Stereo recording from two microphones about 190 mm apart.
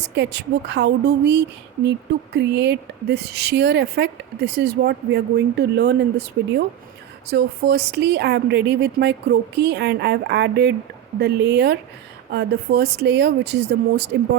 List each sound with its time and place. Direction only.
0.0 s speech: 65° right (ahead or behind)